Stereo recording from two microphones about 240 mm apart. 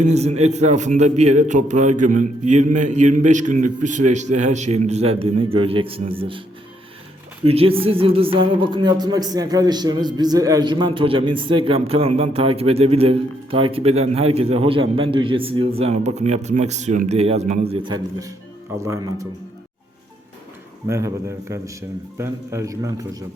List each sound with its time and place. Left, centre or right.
0.0 s speech: right
7.4 s speech: right
20.8 s speech: centre